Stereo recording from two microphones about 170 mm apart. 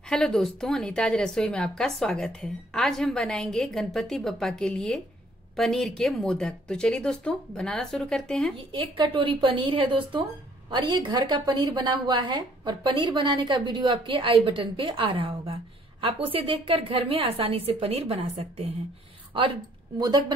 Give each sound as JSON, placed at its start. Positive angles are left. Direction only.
{"t": 0.1, "sound": "a woman's voice", "side_deg": 5}
{"t": 8.5, "sound": "a woman's voice", "side_deg": -30}